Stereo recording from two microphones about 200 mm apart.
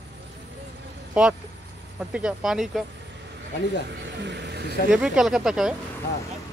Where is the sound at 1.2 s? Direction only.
5° right (ahead or behind).